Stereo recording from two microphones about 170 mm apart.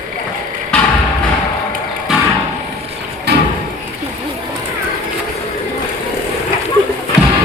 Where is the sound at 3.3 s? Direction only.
75° right (ahead or behind).